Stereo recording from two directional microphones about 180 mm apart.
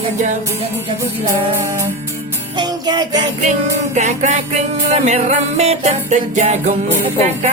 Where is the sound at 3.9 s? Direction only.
45° right (ahead or behind).